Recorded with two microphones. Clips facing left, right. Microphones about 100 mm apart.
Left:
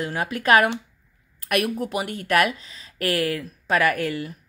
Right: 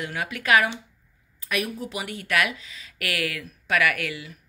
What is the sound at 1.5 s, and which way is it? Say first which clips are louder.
Speech: left 5 dB; 55° left (ahead or behind).